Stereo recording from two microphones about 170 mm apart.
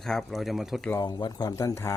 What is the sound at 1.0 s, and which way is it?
Speech, 25° left (ahead or behind).